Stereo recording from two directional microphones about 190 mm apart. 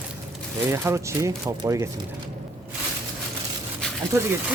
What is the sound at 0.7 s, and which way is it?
Speech, 15° right (ahead or behind).